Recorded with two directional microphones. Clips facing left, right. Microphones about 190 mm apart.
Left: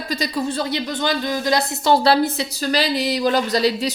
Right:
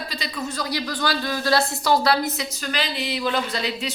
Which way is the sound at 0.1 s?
40° left (ahead or behind).